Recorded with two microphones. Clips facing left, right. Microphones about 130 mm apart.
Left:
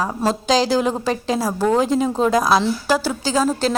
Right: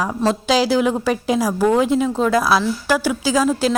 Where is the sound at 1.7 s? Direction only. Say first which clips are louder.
Left 1 dB; 35° left (ahead or behind).